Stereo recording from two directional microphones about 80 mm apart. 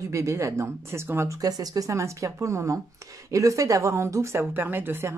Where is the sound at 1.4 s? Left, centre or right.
Right.